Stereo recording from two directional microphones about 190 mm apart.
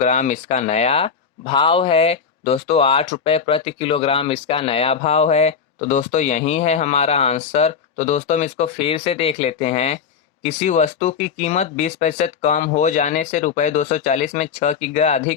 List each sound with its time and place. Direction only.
0.0 s speech: 40° left (ahead or behind)